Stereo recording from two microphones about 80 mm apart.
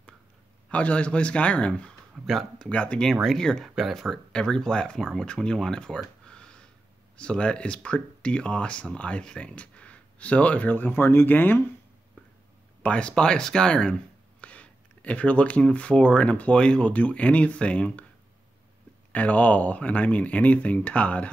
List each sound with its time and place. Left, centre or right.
0.7 s speech: centre
2.2 s speech: centre
2.7 s speech: centre
3.1 s speech: centre; by 11.6 s left
12.2 s a sound: left
12.8 s speech: centre
19.1 s speech: centre